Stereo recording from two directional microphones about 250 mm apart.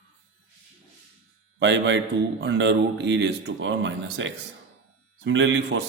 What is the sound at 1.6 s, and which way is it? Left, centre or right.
Speech, right.